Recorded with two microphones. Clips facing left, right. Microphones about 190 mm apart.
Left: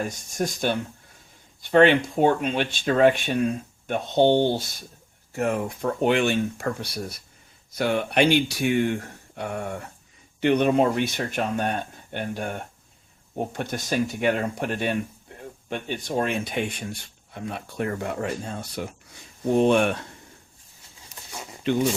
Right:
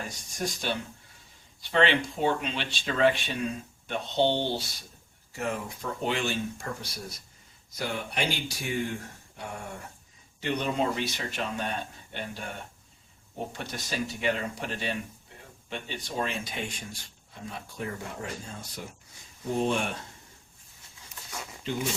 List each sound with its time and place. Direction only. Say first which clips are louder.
0.3 s speech: left 6 dB; 50° left (ahead or behind); by 20.0 s 65° left (ahead or behind)
21.7 s speech: left 10 dB; 70° left (ahead or behind)